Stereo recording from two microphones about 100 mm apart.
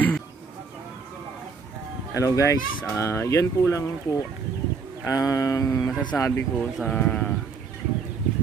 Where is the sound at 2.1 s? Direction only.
35° left (ahead or behind).